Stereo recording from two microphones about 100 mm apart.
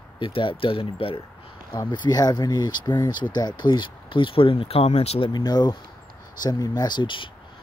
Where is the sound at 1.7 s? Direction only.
50° left (ahead or behind); by 5.2 s 90° left.